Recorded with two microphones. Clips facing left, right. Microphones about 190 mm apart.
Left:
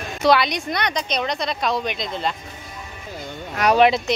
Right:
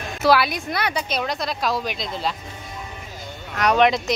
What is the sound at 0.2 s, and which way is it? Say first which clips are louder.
Speech: left 1 dB; 5° right (ahead or behind).